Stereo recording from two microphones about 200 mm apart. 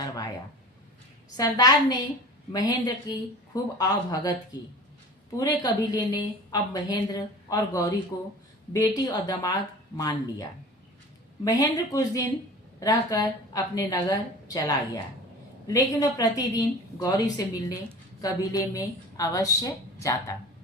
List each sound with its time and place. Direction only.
1.4 s a woman's voice: 20° left (ahead or behind)
5.4 s a woman's voice: 20° left (ahead or behind)
11.4 s a woman's voice: 20° left (ahead or behind)